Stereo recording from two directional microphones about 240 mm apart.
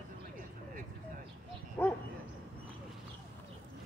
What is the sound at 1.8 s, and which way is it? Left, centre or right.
Dog, centre.